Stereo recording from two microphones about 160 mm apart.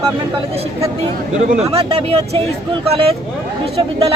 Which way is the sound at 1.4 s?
45° right (ahead or behind).